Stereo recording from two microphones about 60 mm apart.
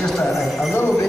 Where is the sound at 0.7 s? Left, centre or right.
Left.